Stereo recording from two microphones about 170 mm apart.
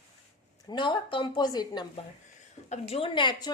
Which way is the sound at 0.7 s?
25° left (ahead or behind).